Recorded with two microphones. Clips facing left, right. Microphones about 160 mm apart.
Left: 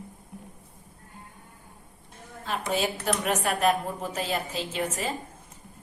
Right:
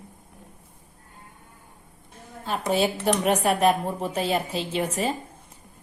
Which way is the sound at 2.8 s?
35° right (ahead or behind).